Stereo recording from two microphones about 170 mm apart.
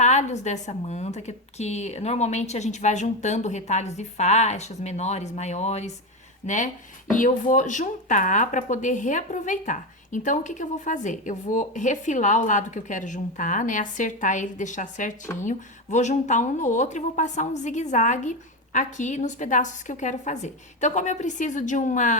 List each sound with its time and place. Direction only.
0.0 s a woman's voice: 45° left (ahead or behind)